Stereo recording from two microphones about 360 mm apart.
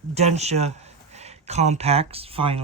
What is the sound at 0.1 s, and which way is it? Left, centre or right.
Speech, centre.